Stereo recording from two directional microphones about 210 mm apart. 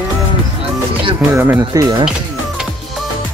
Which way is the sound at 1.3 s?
10° right (ahead or behind).